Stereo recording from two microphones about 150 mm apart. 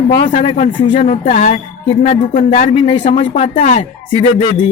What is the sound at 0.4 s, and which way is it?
Speech, 45° left (ahead or behind).